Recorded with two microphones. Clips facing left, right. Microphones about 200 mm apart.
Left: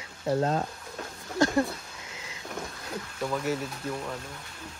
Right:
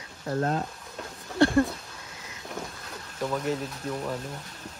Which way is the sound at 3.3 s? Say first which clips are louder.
Right 1 dB; 5° left (ahead or behind).